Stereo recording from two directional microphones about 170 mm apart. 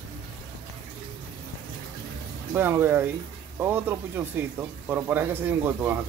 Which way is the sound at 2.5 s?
10° right (ahead or behind).